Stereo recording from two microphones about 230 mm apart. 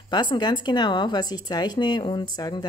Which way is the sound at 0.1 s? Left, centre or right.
Centre.